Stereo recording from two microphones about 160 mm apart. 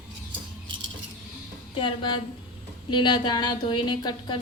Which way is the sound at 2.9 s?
30° left (ahead or behind).